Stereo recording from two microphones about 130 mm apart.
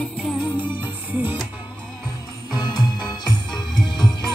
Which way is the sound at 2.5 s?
30° left (ahead or behind).